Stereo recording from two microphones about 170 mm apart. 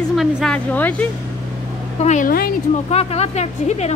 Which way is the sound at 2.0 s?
50° left (ahead or behind).